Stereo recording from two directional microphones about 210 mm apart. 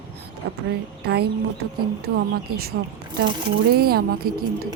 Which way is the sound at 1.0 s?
50° right (ahead or behind).